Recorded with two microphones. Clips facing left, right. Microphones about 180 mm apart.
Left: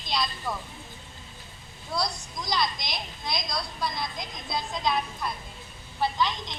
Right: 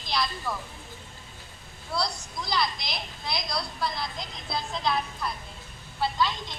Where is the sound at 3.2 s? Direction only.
20° left (ahead or behind).